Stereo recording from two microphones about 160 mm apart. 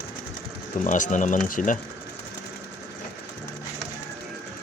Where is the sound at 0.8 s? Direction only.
50° left (ahead or behind).